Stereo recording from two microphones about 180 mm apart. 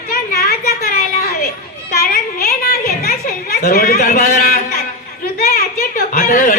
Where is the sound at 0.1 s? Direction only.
55° left (ahead or behind).